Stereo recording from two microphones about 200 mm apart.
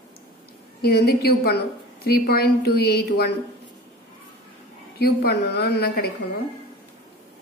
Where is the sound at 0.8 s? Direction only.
50° left (ahead or behind).